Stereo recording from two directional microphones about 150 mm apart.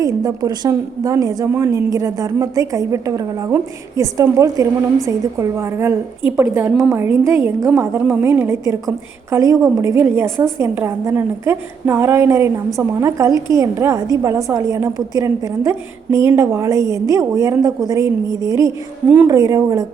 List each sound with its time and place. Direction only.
0.0 s a woman's voice: 25° right (ahead or behind)